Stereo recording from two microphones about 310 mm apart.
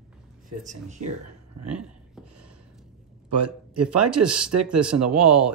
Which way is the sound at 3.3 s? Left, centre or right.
Right.